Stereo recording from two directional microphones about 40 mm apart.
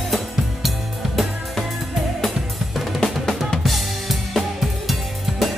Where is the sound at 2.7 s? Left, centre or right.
Centre.